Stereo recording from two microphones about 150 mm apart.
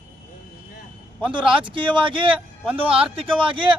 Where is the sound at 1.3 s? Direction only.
35° right (ahead or behind).